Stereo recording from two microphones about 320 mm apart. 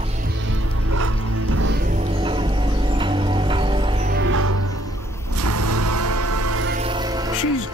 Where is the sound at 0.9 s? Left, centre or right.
Right.